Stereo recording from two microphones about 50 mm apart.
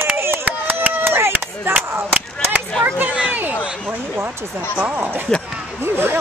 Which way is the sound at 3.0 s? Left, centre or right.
Right.